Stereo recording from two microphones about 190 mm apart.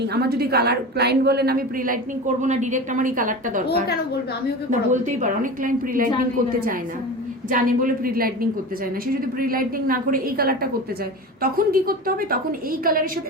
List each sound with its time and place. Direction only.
0.0 s a woman's voice: 60° right (ahead or behind)
4.9 s a woman's voice: 40° right (ahead or behind)
7.5 s a woman's voice: 45° right (ahead or behind)